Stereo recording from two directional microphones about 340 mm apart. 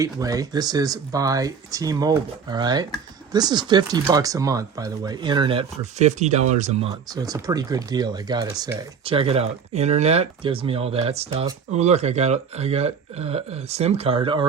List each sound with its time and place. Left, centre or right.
0.0 s speech: centre